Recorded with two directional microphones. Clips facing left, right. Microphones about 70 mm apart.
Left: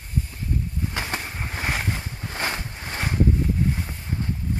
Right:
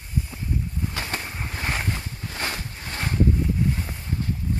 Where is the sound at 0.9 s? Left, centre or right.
Centre.